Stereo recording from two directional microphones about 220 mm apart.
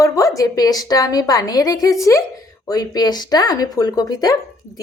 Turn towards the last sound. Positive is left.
turn(degrees=20)  # may be behind; listen again after turning